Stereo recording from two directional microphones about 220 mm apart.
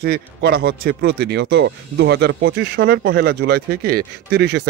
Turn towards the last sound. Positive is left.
turn(degrees=-50)  # may be behind; listen again after turning